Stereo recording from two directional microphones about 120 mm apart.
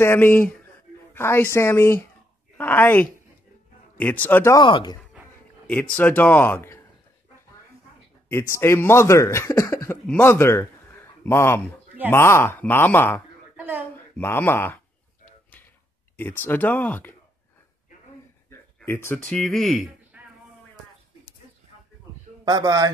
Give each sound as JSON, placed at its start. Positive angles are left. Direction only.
{"t": 0.0, "sound": "speech", "side_deg": 20}
{"t": 4.6, "sound": "speech", "side_deg": 40}
{"t": 5.7, "sound": "speech", "side_deg": 15}
{"t": 8.3, "sound": "a man's voice", "side_deg": 20}
{"t": 13.6, "sound": "a sound", "side_deg": -15}
{"t": 14.1, "sound": "speech", "side_deg": 15}
{"t": 15.2, "sound": "a sound", "side_deg": 15}
{"t": 16.2, "sound": "speech", "side_deg": 15}
{"t": 18.9, "sound": "speech", "side_deg": 20}
{"t": 19.2, "sound": "speech", "side_deg": 5}
{"t": 20.1, "sound": "a sound", "side_deg": -15}
{"t": 22.4, "sound": "a man's voice", "side_deg": -35}